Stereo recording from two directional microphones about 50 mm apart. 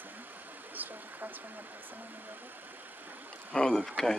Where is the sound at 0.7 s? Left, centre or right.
Right.